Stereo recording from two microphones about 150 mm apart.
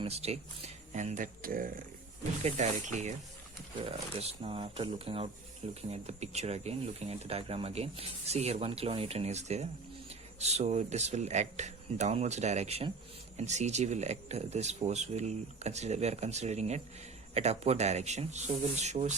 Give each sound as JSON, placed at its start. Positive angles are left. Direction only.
{"t": 0.0, "sound": "speech", "side_deg": -45}
{"t": 2.4, "sound": "speech", "side_deg": -50}
{"t": 3.8, "sound": "speech", "side_deg": -40}